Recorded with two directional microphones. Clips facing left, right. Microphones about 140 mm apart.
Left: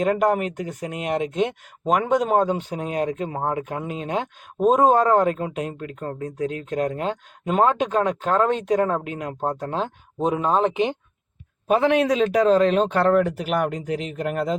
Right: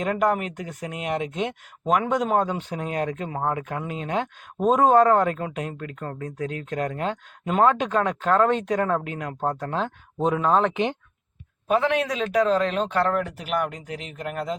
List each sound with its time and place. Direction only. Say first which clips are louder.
0.0 s speech: left 3 dB; 30° left (ahead or behind)
2.7 s speech: left 2 dB; 20° left (ahead or behind)